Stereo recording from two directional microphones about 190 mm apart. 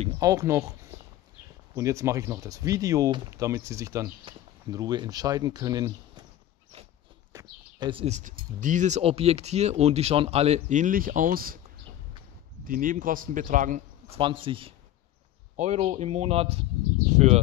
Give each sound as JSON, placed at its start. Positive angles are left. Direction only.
{"t": 0.2, "sound": "speech", "side_deg": -20}
{"t": 1.8, "sound": "speech", "side_deg": -15}
{"t": 7.3, "sound": "bird", "side_deg": -25}
{"t": 8.5, "sound": "speech", "side_deg": -40}
{"t": 12.6, "sound": "a man's voice", "side_deg": -45}
{"t": 15.5, "sound": "speech", "side_deg": -40}